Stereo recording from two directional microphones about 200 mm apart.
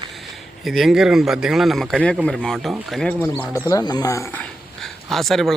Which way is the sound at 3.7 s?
20° left (ahead or behind).